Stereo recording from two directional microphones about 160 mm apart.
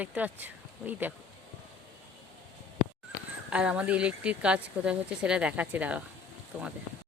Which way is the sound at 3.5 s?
5° right (ahead or behind).